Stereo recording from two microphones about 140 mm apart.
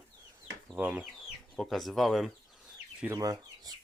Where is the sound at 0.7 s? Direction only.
10° right (ahead or behind).